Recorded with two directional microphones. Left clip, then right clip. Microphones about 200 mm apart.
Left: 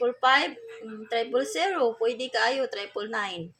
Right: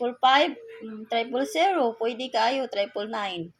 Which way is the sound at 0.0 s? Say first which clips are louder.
Right 2 dB; 15° right (ahead or behind).